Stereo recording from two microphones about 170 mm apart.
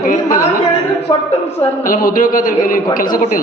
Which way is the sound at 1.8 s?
55° left (ahead or behind).